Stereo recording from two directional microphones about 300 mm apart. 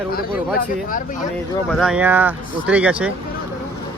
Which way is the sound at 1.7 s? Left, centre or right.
Centre.